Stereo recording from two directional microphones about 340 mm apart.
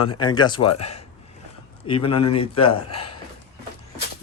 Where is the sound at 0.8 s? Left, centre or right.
Centre.